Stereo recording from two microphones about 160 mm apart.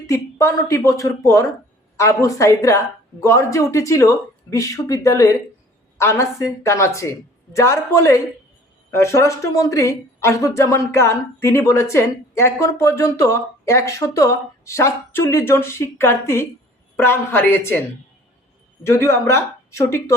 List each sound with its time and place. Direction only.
0.1 s a woman's voice: 20° left (ahead or behind)
18.8 s a woman's voice: 15° left (ahead or behind)